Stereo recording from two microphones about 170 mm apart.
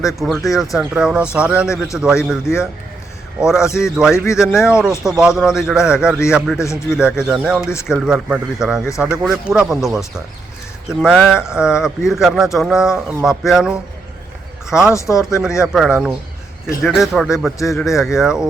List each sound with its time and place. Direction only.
0.0 s speech: centre (ahead or behind)
2.4 s a man's voice: 15° left (ahead or behind)
3.8 s speech: 5° right (ahead or behind)
4.1 s a man's voice: 15° left (ahead or behind)
4.7 s speech: 5° right (ahead or behind)
14.9 s a man's voice: 15° left (ahead or behind)
15.4 s speech: 5° right (ahead or behind)